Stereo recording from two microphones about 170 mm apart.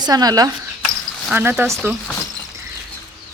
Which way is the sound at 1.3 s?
10° right (ahead or behind).